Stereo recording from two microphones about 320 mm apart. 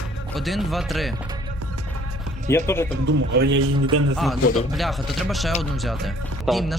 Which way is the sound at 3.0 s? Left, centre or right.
Right.